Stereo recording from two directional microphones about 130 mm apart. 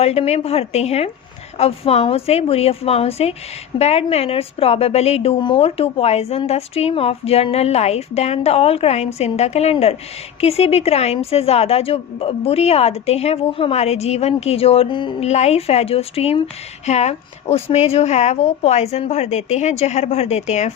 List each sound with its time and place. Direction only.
0.0 s speech: 50° left (ahead or behind)
15.2 s a woman's voice: 55° left (ahead or behind)